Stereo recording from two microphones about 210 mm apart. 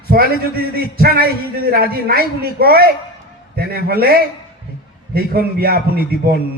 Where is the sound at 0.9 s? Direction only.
45° right (ahead or behind).